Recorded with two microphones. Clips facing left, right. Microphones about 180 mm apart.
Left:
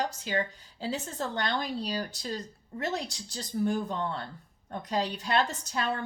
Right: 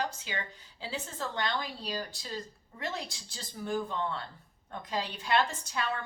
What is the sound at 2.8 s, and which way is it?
Speech, 45° left (ahead or behind).